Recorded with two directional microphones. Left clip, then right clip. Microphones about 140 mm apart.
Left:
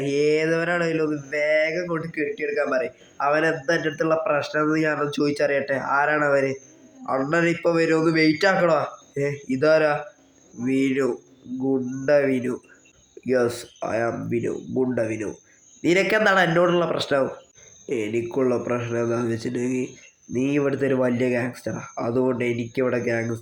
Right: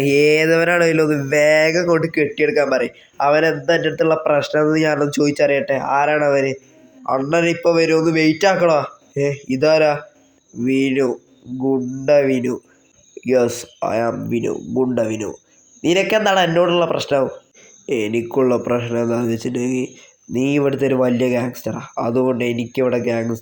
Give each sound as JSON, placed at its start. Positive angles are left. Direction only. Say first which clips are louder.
{"t": 0.0, "sound": "a sound", "louder": "right 7 dB", "side_deg": -35}
{"t": 3.2, "sound": "a man's voice", "louder": "right 6 dB", "side_deg": -25}
{"t": 17.8, "sound": "a man's voice", "louder": "right 5 dB", "side_deg": -30}